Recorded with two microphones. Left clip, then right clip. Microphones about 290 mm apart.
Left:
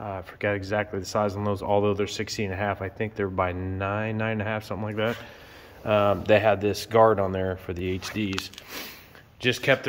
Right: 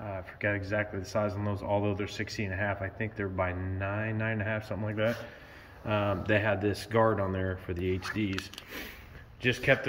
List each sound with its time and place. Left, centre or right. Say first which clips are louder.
0.0 s speech: left 4 dB; centre